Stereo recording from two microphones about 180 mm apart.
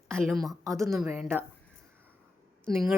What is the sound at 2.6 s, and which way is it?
Speech, centre (ahead or behind).